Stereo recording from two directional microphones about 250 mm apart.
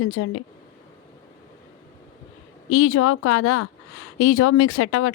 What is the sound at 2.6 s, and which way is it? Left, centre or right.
Speech, left.